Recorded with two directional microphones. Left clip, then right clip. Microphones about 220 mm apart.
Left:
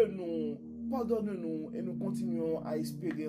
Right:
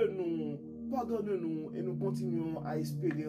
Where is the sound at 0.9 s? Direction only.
35° left (ahead or behind).